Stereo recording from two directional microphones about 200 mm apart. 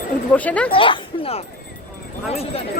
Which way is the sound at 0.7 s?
25° left (ahead or behind).